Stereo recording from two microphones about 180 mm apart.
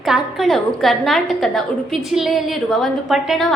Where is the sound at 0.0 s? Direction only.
Centre (ahead or behind).